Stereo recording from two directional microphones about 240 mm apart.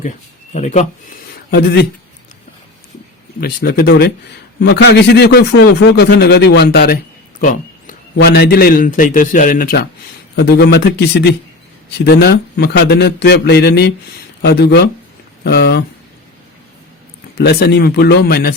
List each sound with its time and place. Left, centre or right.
0.5 s speech: left
1.5 s a man's voice: left
3.4 s a man's voice: left
17.3 s a man's voice: left